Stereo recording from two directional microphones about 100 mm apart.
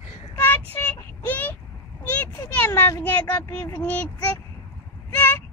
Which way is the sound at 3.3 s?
40° left (ahead or behind).